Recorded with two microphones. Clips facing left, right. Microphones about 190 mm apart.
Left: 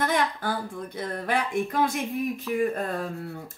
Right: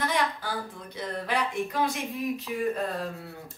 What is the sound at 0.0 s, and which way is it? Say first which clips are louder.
Speech: left 3 dB; 55° left (ahead or behind).